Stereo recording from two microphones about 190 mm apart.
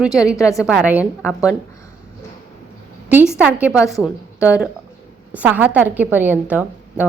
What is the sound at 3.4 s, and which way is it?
A woman's voice, 5° right (ahead or behind).